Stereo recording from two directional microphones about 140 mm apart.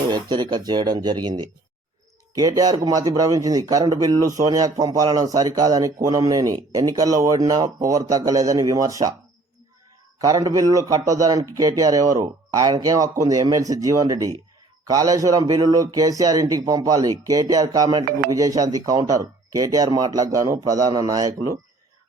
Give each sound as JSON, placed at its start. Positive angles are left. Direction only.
{"t": 0.1, "sound": "speech", "side_deg": -30}
{"t": 10.2, "sound": "speech", "side_deg": -25}